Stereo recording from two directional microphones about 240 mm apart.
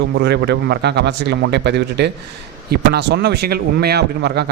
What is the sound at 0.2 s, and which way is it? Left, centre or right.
A man's voice, right.